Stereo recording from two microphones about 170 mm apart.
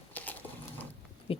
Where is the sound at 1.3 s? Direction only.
35° left (ahead or behind).